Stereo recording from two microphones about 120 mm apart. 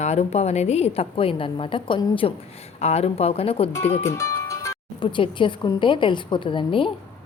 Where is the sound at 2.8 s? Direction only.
60° left (ahead or behind).